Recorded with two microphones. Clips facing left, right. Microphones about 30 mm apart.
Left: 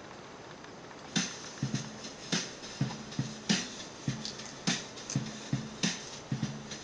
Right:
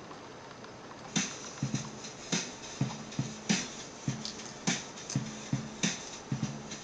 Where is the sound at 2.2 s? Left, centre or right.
Left.